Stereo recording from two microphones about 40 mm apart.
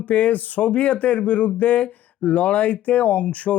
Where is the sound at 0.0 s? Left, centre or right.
Left.